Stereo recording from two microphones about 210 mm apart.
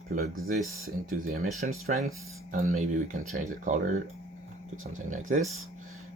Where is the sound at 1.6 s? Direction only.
30° right (ahead or behind).